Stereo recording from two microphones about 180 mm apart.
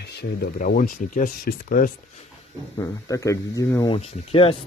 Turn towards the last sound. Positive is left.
turn(degrees=30)  # may be behind; listen again after turning